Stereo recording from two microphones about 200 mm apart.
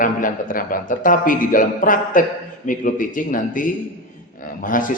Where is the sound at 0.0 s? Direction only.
40° left (ahead or behind).